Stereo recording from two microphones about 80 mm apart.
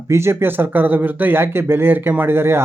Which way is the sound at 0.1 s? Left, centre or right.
Right.